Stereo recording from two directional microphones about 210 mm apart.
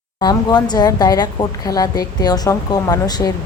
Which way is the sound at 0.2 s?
20° left (ahead or behind).